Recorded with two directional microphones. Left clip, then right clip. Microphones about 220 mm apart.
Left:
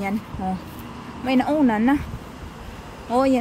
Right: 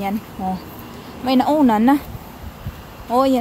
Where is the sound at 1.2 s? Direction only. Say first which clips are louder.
Right 4 dB; 10° right (ahead or behind).